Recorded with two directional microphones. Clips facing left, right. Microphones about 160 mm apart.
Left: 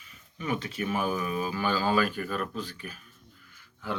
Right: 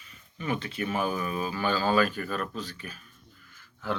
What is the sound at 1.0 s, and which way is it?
Speech, 35° right (ahead or behind).